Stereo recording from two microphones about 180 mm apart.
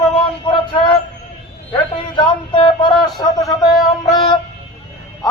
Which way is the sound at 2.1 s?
25° left (ahead or behind).